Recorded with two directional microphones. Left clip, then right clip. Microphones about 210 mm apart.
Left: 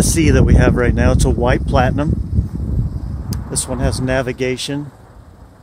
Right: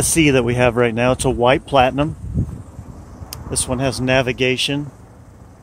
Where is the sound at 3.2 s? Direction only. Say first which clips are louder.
Right 1 dB; centre (ahead or behind).